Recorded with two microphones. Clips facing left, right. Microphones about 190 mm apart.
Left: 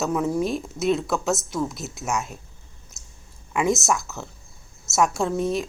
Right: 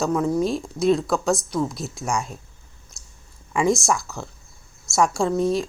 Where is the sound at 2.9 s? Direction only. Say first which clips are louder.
Even; 20° left (ahead or behind).